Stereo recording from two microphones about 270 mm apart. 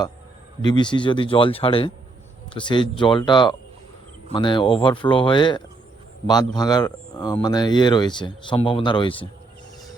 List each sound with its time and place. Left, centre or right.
0.6 s speech: centre